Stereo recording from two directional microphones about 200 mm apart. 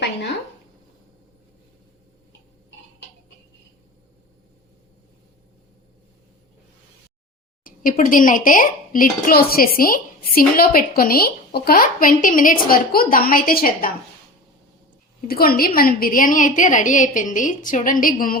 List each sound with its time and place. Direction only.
7.6 s a child's voice: 45° left (ahead or behind)
15.3 s a child's voice: 50° left (ahead or behind)